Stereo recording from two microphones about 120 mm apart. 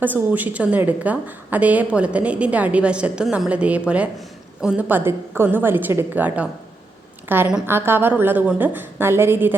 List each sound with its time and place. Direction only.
0.0 s a woman's voice: 15° right (ahead or behind)